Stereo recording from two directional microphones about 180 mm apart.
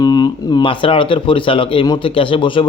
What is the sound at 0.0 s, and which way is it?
Speech, 25° left (ahead or behind).